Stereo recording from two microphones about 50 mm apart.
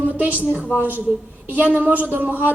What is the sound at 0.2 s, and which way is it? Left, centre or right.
A woman's voice, right.